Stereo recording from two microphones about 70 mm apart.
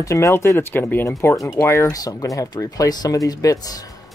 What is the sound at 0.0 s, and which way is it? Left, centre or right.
Speech, left.